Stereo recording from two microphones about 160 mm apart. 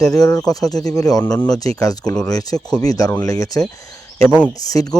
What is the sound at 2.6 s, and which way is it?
Speech, 5° left (ahead or behind).